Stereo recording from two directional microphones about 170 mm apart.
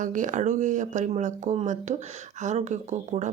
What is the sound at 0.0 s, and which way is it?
A woman's voice, 50° right (ahead or behind).